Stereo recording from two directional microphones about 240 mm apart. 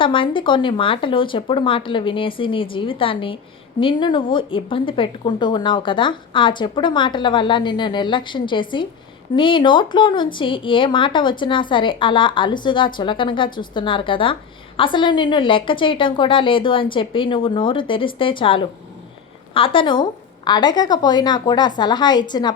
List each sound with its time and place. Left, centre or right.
0.0 s a woman's voice: left